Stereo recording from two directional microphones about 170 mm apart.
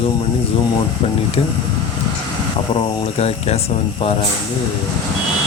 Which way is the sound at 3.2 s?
35° left (ahead or behind).